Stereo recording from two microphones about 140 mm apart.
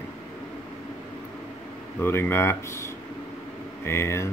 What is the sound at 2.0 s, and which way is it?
Speech, 15° left (ahead or behind).